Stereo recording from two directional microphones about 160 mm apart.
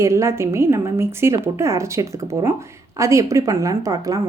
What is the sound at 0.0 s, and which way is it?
A woman's voice, 20° right (ahead or behind).